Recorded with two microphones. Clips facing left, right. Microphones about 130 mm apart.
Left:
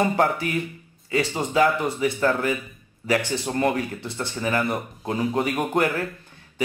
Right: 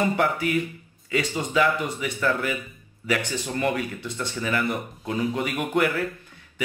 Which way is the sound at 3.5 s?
40° left (ahead or behind).